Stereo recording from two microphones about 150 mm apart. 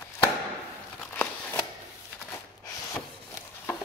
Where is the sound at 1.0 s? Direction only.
10° left (ahead or behind).